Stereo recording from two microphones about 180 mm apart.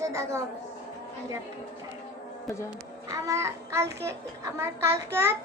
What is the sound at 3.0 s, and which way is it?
A child's voice, 20° right (ahead or behind).